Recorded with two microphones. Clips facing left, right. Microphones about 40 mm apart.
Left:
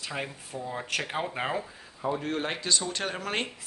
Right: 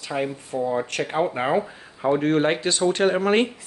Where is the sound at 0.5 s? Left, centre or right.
Right.